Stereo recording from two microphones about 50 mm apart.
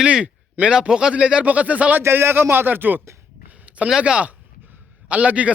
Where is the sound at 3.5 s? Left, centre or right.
Right.